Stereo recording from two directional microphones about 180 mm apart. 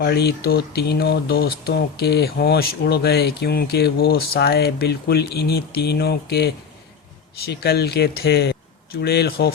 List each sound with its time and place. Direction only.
0.0 s speech: 65° left (ahead or behind)